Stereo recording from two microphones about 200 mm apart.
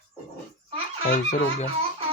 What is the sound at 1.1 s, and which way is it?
Speech, 40° left (ahead or behind).